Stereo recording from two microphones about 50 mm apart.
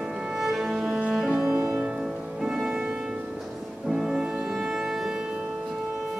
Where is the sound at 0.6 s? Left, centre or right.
Centre.